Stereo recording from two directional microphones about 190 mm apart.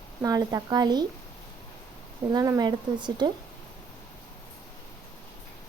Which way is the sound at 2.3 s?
20° right (ahead or behind).